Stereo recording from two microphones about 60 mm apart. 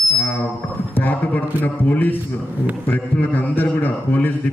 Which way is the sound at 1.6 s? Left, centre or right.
Left.